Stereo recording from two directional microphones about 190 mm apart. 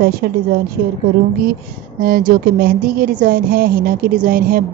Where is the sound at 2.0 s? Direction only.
50° right (ahead or behind).